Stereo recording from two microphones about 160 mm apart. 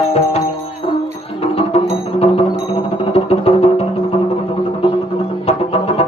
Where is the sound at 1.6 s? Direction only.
40° left (ahead or behind).